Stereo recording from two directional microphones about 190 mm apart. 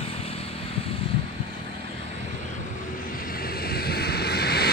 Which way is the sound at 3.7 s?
55° left (ahead or behind).